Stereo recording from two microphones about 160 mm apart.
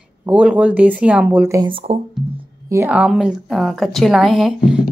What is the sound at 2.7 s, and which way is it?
A woman's voice, 10° right (ahead or behind).